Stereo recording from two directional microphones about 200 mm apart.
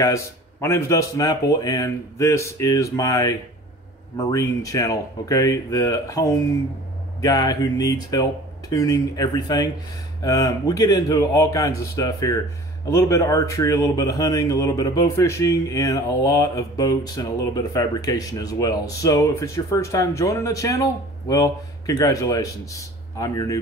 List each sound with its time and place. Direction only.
0.0 s speech: 15° left (ahead or behind)